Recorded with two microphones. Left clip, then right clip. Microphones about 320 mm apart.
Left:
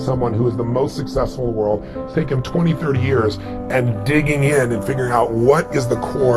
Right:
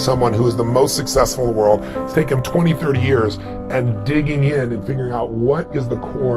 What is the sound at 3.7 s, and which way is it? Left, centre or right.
Speech, centre.